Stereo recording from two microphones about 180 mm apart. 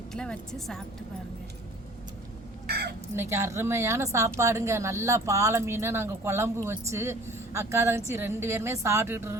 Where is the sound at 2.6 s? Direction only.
65° right (ahead or behind).